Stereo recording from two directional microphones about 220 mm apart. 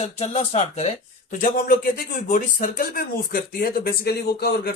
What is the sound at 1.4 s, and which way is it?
Speech, 40° left (ahead or behind).